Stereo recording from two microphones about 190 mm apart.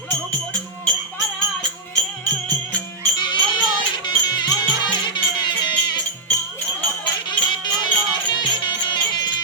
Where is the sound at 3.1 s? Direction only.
25° left (ahead or behind).